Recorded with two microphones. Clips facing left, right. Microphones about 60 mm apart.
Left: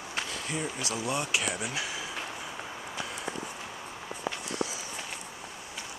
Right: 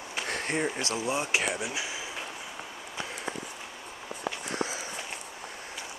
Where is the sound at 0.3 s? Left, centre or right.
Right.